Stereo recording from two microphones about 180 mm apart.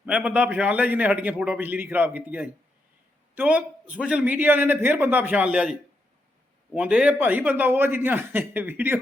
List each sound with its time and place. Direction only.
0.0 s a man's voice: 5° right (ahead or behind)
6.7 s a man's voice: 5° right (ahead or behind)